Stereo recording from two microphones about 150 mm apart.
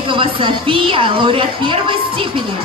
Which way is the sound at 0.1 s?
35° right (ahead or behind).